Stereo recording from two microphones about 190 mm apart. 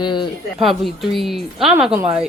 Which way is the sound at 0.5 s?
Centre (ahead or behind).